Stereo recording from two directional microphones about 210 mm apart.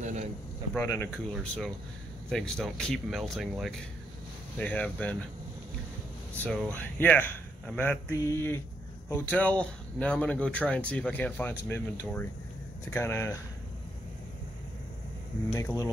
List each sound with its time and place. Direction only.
0.0 s a man's voice: 35° right (ahead or behind)
0.7 s speech: 10° left (ahead or behind)
6.3 s speech: 5° left (ahead or behind)
15.5 s speech: 15° left (ahead or behind)